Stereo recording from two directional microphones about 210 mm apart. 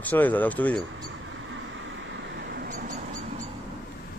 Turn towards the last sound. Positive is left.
turn(degrees=-35)  # may be behind; listen again after turning